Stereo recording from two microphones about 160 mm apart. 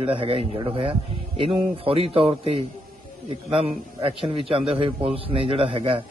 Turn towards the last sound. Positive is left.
turn(degrees=-35)  # may be behind; listen again after turning